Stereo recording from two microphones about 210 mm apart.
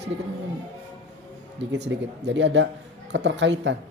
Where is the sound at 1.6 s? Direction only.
55° right (ahead or behind).